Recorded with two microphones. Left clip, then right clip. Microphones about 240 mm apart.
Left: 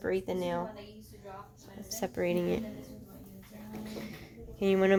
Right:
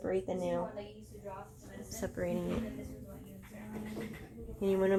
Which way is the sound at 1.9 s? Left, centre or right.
Left.